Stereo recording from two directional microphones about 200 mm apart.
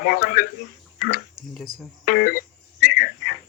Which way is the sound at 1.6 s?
45° left (ahead or behind).